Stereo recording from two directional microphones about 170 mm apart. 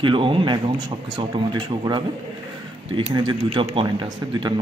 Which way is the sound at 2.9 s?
30° right (ahead or behind).